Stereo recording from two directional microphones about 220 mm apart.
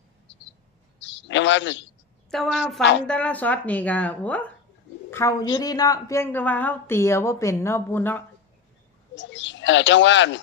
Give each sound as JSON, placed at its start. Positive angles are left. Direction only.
{"t": 0.9, "sound": "a sound", "side_deg": 55}
{"t": 2.3, "sound": "a woman's voice", "side_deg": 0}
{"t": 9.1, "sound": "speech", "side_deg": 55}